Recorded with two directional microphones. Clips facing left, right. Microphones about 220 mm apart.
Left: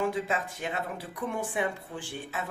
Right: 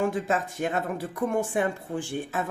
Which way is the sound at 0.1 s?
45° right (ahead or behind).